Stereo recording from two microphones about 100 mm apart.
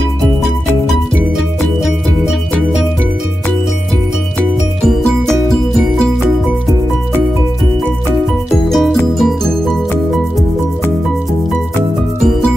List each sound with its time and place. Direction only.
4.4 s music: 5° left (ahead or behind)
8.5 s music: centre (ahead or behind)